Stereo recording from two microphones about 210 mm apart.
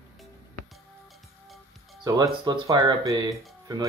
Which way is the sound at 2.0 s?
20° right (ahead or behind).